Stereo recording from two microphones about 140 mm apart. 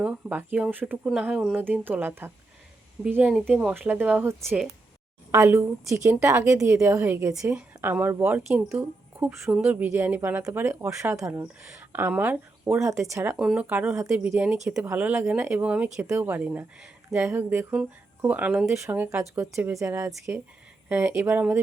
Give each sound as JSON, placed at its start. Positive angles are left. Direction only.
{"t": 0.0, "sound": "a woman's voice", "side_deg": -10}
{"t": 13.3, "sound": "a woman's voice", "side_deg": -5}